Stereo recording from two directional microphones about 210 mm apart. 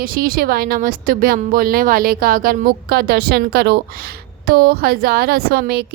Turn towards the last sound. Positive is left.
turn(degrees=-50)  # may be behind; listen again after turning